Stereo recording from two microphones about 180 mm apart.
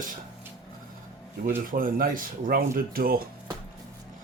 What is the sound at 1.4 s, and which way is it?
Speech, 50° right (ahead or behind).